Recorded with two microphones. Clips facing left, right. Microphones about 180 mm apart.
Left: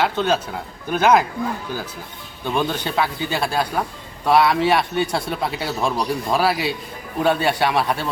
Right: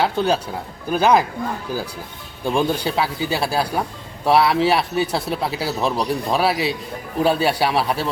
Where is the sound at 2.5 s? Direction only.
10° right (ahead or behind).